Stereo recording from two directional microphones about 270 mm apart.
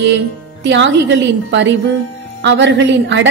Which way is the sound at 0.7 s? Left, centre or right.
Right.